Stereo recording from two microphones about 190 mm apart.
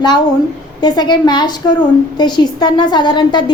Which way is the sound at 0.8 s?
20° left (ahead or behind).